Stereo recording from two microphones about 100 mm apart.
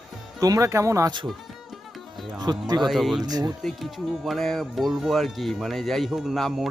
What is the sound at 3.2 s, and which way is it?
Speech, 40° right (ahead or behind).